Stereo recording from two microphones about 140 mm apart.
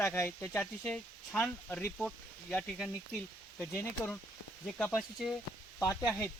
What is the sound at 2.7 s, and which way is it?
Speech, 5° right (ahead or behind).